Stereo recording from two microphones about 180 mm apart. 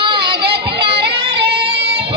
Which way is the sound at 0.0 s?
25° right (ahead or behind).